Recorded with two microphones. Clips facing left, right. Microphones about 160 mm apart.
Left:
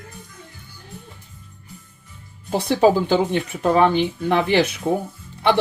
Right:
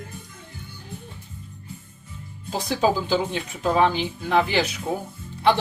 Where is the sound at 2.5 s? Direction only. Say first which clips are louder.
Left 6 dB; 65° left (ahead or behind).